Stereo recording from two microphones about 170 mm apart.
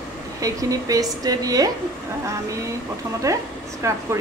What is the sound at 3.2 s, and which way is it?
Speech, 20° right (ahead or behind).